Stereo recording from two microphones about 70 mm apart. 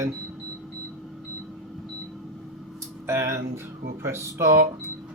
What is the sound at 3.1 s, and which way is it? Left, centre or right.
Speech, right.